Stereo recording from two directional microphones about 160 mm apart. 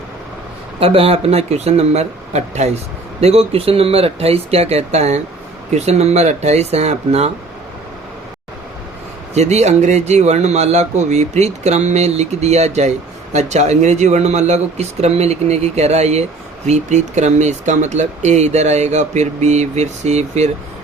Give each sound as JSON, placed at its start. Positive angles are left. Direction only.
{"t": 0.8, "sound": "speech", "side_deg": -35}
{"t": 9.3, "sound": "speech", "side_deg": -45}